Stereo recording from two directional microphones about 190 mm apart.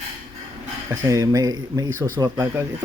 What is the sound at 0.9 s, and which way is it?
Speech, 20° right (ahead or behind).